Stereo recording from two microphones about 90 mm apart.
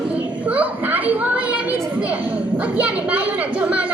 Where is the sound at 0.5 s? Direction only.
15° right (ahead or behind).